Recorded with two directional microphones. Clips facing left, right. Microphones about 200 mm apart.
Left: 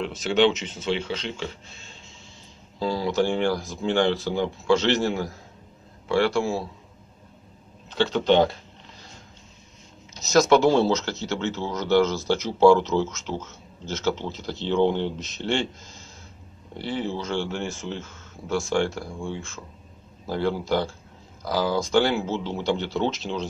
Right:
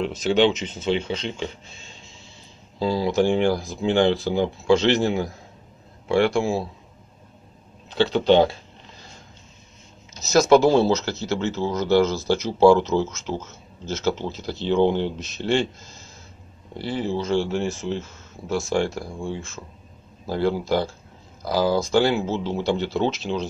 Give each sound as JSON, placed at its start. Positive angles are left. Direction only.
{"t": 0.0, "sound": "speech", "side_deg": -20}
{"t": 2.8, "sound": "speech", "side_deg": -15}
{"t": 7.9, "sound": "speech", "side_deg": -15}
{"t": 10.3, "sound": "speech", "side_deg": -5}
{"t": 16.7, "sound": "speech", "side_deg": -10}
{"t": 18.8, "sound": "speech", "side_deg": -15}